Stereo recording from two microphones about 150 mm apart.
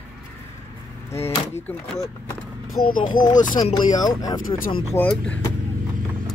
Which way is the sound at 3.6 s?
25° left (ahead or behind).